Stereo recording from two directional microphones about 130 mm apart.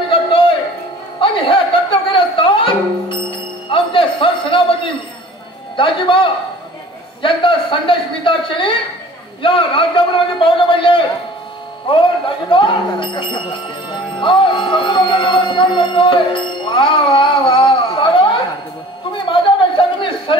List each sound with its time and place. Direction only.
0.1 s music: 45° left (ahead or behind)
5.8 s speech: 40° left (ahead or behind)
12.4 s speech: 40° left (ahead or behind)
19.3 s a sound: 40° left (ahead or behind)